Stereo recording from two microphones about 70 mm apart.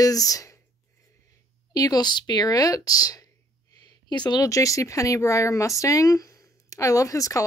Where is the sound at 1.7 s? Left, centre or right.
Left.